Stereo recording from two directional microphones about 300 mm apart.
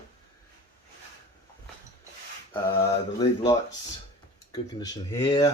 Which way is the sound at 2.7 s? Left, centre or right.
Centre.